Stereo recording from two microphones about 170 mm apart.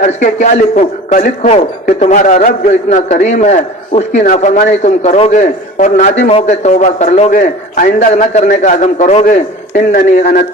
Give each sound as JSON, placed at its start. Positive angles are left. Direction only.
{"t": 0.0, "sound": "a man's voice", "side_deg": 45}
{"t": 9.2, "sound": "a man's voice", "side_deg": 55}
{"t": 10.2, "sound": "a man's voice", "side_deg": 65}